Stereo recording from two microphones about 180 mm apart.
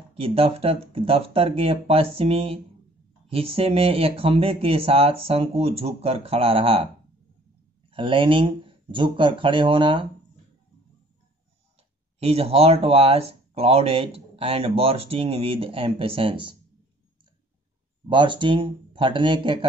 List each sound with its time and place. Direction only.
0.1 s speech: 30° right (ahead or behind)
7.9 s speech: 30° right (ahead or behind)
12.2 s speech: 35° right (ahead or behind)
18.0 s speech: 25° right (ahead or behind)